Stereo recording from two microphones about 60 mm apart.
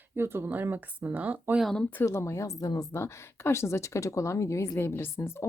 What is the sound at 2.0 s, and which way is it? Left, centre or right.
Speech, left.